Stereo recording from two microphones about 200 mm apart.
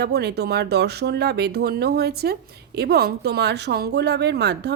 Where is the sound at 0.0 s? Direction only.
55° right (ahead or behind).